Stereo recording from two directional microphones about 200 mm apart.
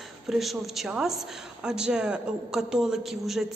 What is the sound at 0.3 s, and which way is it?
A woman's voice, centre (ahead or behind).